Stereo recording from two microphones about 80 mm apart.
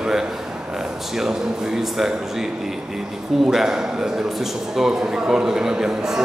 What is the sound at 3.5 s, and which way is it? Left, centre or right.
A man's voice, centre.